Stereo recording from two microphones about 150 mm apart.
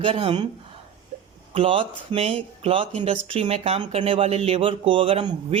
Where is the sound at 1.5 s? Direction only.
40° right (ahead or behind).